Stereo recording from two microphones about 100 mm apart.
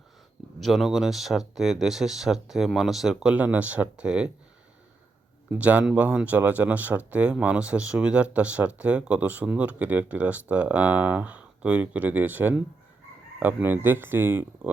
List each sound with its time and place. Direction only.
0.6 s speech: centre (ahead or behind)
5.5 s speech: 15° right (ahead or behind)